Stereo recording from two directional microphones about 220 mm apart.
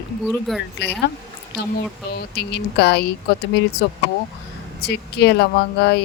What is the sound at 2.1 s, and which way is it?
Speech, 50° left (ahead or behind).